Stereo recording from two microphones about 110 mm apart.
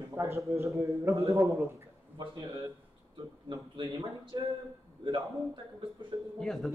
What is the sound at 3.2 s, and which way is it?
Speech, 45° right (ahead or behind).